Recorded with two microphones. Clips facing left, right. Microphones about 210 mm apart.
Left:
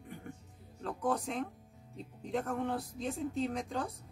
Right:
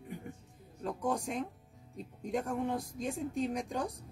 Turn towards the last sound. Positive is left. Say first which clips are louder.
# right 1 dB
turn(degrees=-15)  # may be behind; listen again after turning